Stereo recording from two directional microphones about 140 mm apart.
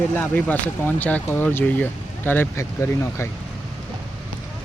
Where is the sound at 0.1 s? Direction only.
10° left (ahead or behind).